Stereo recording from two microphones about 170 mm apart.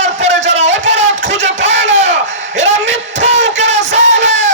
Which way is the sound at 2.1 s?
90° right.